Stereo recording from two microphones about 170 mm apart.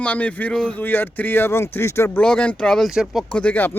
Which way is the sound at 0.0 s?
5° left (ahead or behind).